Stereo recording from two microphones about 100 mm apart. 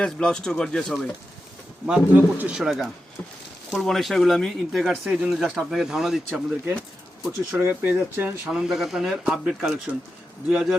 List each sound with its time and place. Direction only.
0.0 s speech: 10° left (ahead or behind)
1.9 s speech: 15° right (ahead or behind)
2.6 s a man's voice: centre (ahead or behind)
7.6 s speech: 20° right (ahead or behind)
8.4 s a man's voice: 5° right (ahead or behind)